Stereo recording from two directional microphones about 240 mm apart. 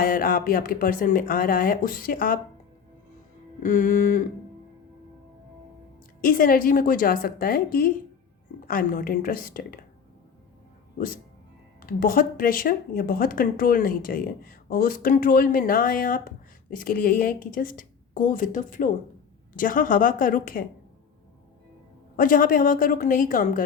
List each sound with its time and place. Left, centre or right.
0.0 s speech: left
3.6 s speech: left
6.2 s speech: left
11.9 s speech: left
22.1 s speech: left